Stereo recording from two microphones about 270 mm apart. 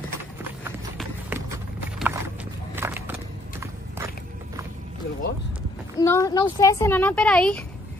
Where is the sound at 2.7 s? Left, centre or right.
Centre.